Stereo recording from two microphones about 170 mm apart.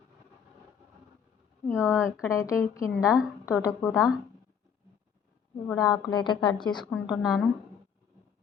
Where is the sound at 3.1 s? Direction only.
5° right (ahead or behind).